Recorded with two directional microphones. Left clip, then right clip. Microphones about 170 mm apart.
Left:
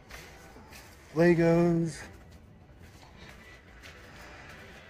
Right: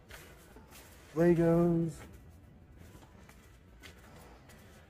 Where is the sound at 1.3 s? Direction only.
20° left (ahead or behind).